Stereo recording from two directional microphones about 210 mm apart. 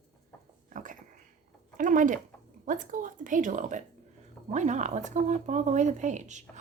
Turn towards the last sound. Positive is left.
turn(degrees=-35)  # may be behind; listen again after turning